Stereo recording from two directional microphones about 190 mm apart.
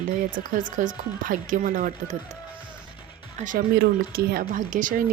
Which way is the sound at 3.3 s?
40° right (ahead or behind).